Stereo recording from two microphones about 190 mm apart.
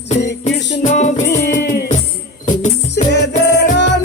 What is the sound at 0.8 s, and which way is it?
Music, 40° left (ahead or behind).